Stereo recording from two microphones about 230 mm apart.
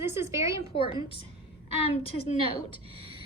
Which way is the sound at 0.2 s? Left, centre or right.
Centre.